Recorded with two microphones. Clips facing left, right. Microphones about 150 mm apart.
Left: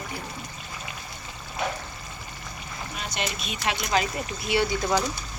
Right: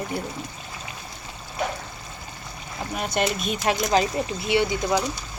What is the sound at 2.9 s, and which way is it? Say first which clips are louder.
Speech: right 8 dB; 55° right (ahead or behind).